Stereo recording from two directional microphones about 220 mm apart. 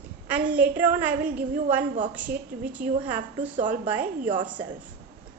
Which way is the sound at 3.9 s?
10° right (ahead or behind).